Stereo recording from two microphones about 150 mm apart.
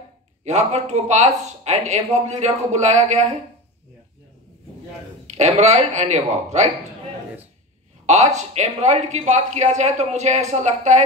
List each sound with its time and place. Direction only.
0.4 s speech: 50° right (ahead or behind)
5.4 s speech: 50° right (ahead or behind)
8.4 s speech: 50° right (ahead or behind)